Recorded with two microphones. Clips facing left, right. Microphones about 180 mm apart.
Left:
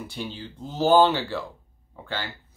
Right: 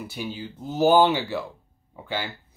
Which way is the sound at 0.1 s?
10° right (ahead or behind).